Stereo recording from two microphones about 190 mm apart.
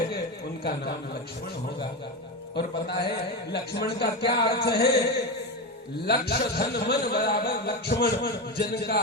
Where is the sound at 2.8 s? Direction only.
60° left (ahead or behind).